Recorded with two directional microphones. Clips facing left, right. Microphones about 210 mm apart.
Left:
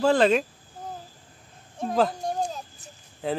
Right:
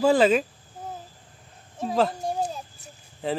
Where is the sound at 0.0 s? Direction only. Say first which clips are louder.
Right 1 dB; 5° right (ahead or behind).